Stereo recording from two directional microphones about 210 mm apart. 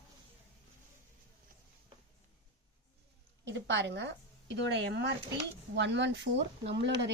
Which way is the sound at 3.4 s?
55° right (ahead or behind).